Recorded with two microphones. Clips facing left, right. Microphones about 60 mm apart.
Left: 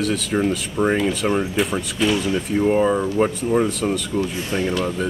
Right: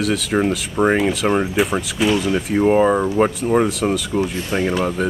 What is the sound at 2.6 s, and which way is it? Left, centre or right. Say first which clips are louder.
Speech: right 3 dB; right.